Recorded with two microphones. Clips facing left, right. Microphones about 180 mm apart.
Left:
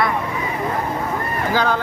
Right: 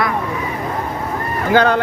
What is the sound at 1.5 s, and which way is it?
Speech, 65° right (ahead or behind).